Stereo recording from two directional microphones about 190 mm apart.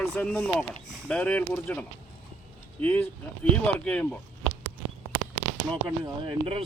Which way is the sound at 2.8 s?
10° left (ahead or behind).